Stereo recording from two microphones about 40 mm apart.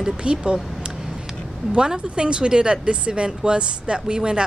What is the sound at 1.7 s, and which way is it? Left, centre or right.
Speech, right.